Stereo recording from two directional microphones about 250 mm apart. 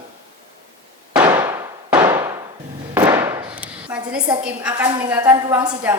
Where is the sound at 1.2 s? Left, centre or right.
Centre.